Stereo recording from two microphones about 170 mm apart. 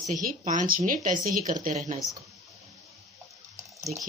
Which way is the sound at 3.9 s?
50° right (ahead or behind).